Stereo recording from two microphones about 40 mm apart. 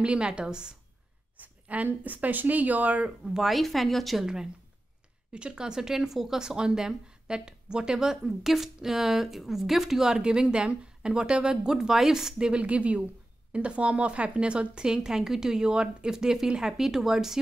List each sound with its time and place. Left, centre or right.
0.0 s speech: right
1.3 s a sound: right
2.1 s speech: right
3.3 s a woman's voice: centre
5.3 s speech: right
10.1 s speech: right
12.4 s speech: right; by 17.4 s centre